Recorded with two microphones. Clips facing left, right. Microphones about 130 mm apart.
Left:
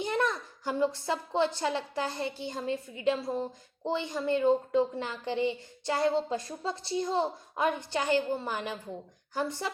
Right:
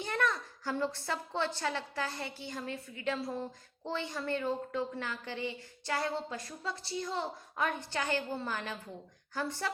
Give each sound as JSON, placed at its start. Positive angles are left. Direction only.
{"t": 0.0, "sound": "a woman's voice", "side_deg": 20}